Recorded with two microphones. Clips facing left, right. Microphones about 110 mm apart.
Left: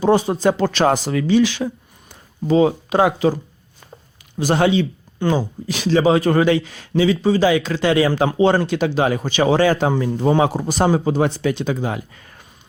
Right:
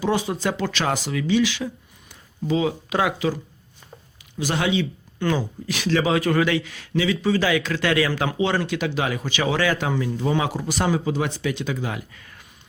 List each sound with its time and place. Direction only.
0.0 s speech: 40° left (ahead or behind)
4.4 s speech: 40° left (ahead or behind)
5.2 s speech: 25° left (ahead or behind)